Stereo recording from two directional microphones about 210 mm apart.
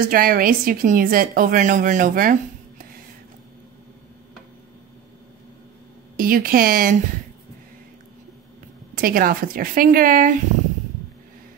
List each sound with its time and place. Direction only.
0.0 s a woman's voice: 45° right (ahead or behind)
6.1 s a woman's voice: 45° right (ahead or behind)
8.9 s a woman's voice: 45° right (ahead or behind)